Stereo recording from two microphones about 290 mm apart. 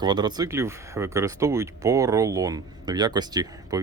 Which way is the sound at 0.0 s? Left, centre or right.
Centre.